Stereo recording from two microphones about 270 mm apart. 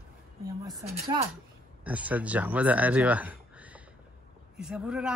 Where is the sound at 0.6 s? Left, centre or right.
Centre.